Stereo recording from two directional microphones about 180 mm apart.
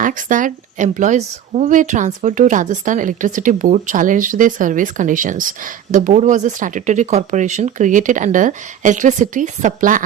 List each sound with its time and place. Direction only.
0.0 s speech: 45° right (ahead or behind)